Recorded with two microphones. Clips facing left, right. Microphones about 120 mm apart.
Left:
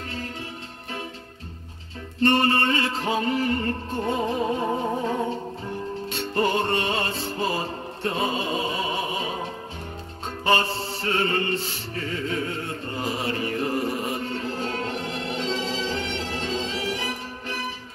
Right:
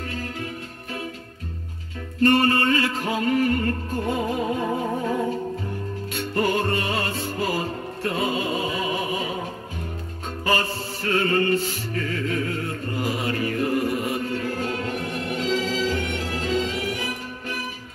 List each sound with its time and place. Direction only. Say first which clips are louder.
2.2 s music: right 2 dB; 30° left (ahead or behind)
6.1 s music: right 1 dB; 30° left (ahead or behind)
10.4 s music: left 2 dB; 30° left (ahead or behind)